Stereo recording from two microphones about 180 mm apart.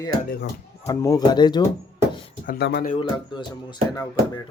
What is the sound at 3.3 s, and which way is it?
Speech, 25° left (ahead or behind).